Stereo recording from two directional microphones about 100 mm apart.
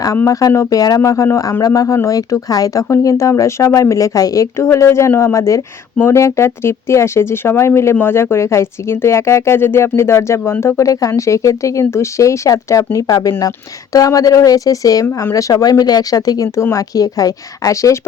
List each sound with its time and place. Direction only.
0.3 s speech: 35° left (ahead or behind)